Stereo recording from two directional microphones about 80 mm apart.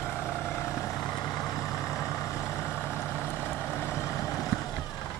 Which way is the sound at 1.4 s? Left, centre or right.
Left.